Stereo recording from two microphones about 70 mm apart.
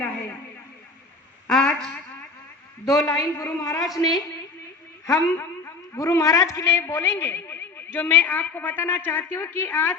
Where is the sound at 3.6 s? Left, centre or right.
Left.